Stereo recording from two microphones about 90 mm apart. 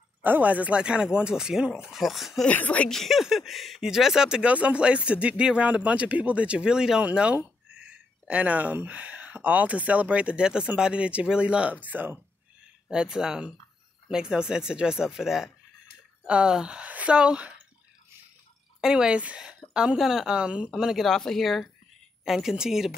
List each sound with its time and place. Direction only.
0.2 s speech: 20° right (ahead or behind); by 2.4 s centre (ahead or behind)
2.4 s speech: 15° left (ahead or behind)
2.9 s speech: centre (ahead or behind); by 12.2 s 20° right (ahead or behind)
12.9 s speech: 5° right (ahead or behind)
18.8 s speech: 10° right (ahead or behind)